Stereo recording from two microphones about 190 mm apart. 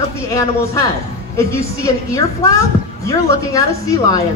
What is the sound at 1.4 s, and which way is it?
Speech, 15° left (ahead or behind).